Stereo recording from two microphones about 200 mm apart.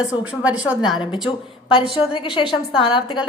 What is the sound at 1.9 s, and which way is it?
Speech, 25° left (ahead or behind).